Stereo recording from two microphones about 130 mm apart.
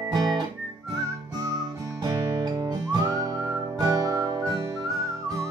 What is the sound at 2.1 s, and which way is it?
Music, 30° right (ahead or behind).